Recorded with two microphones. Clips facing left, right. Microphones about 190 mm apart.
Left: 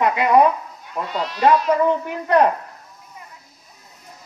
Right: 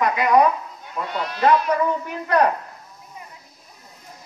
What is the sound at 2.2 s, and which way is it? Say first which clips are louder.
Speech: left 3 dB; 25° left (ahead or behind).